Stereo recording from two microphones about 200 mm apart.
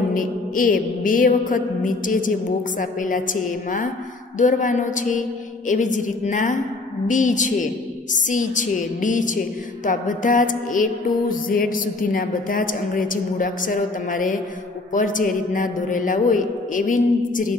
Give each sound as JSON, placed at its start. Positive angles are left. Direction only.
{"t": 0.1, "sound": "music", "side_deg": 45}
{"t": 2.8, "sound": "a man's voice", "side_deg": 40}
{"t": 9.8, "sound": "music", "side_deg": 40}
{"t": 14.9, "sound": "a man's voice", "side_deg": 40}